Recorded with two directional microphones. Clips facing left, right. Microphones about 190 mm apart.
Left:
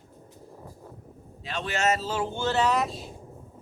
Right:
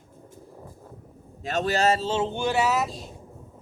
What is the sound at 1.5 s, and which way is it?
Speech, 40° right (ahead or behind).